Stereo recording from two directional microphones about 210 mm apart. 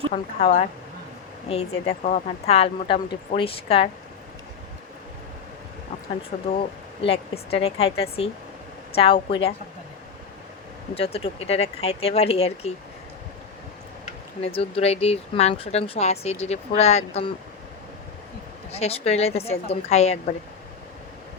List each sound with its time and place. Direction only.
0.1 s speech: 35° left (ahead or behind)
6.6 s speech: 25° left (ahead or behind)
10.9 s speech: 25° left (ahead or behind)
14.0 s speech: 30° left (ahead or behind)
18.7 s speech: 30° left (ahead or behind)